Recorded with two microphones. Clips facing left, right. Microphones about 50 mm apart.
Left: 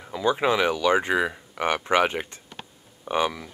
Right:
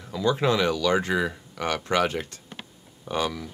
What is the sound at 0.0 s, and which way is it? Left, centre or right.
Speech, left.